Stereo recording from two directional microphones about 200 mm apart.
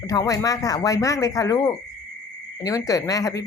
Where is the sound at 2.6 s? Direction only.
15° left (ahead or behind).